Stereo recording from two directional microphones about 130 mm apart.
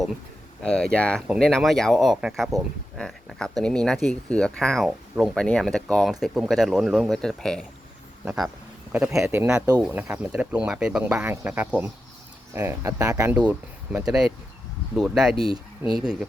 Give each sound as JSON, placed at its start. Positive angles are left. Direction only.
{"t": 0.6, "sound": "speech", "side_deg": 5}
{"t": 4.9, "sound": "speech", "side_deg": -5}
{"t": 9.1, "sound": "speech", "side_deg": -20}
{"t": 9.8, "sound": "speech", "side_deg": -10}
{"t": 13.3, "sound": "speech", "side_deg": -10}